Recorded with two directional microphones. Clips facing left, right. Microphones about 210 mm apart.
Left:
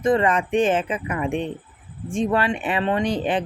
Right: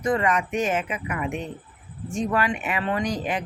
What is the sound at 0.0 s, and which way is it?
Speech, 30° left (ahead or behind).